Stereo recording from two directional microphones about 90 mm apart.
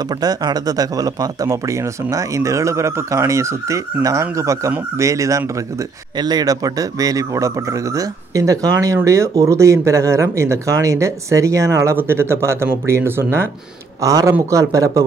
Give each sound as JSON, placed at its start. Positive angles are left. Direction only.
{"t": 0.2, "sound": "speech", "side_deg": -45}